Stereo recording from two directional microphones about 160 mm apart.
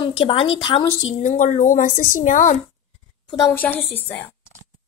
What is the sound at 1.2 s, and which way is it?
Speech, 50° left (ahead or behind).